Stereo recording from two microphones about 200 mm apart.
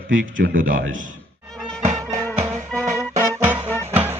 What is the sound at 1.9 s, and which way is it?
Music, 35° right (ahead or behind).